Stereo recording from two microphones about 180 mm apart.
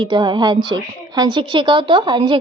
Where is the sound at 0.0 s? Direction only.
25° right (ahead or behind).